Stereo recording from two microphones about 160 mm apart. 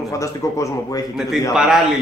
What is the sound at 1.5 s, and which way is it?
Speech, centre (ahead or behind).